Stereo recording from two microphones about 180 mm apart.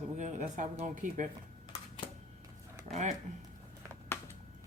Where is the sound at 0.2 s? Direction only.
40° right (ahead or behind).